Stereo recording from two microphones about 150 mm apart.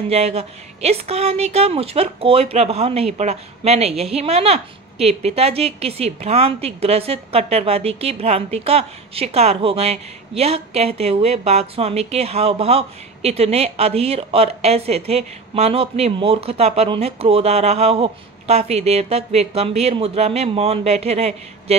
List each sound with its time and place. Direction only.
0.1 s a woman's voice: 45° right (ahead or behind)